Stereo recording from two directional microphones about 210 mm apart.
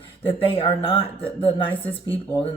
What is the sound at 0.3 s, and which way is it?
Speech, 25° left (ahead or behind).